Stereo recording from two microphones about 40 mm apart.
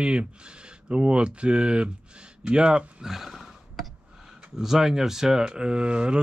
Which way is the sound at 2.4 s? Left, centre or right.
Right.